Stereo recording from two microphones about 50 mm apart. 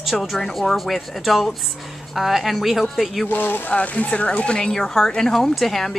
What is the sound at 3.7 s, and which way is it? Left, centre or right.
Speech, left.